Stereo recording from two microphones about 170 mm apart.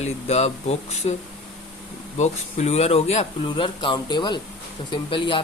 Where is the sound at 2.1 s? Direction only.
45° left (ahead or behind).